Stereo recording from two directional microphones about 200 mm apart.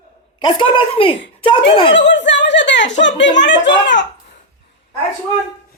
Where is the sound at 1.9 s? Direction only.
60° left (ahead or behind).